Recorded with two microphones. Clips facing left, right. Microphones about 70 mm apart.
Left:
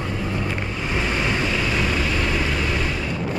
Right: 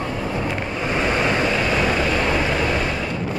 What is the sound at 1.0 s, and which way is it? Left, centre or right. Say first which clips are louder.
Vehicle: right 4 dB; right.